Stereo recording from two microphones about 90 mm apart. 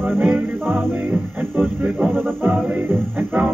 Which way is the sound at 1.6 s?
15° right (ahead or behind).